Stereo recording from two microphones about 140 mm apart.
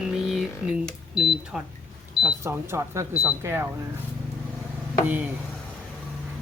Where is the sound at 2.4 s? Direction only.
20° right (ahead or behind).